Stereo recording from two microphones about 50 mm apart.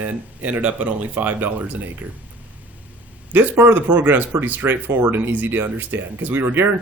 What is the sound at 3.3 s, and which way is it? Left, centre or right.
Speech, right.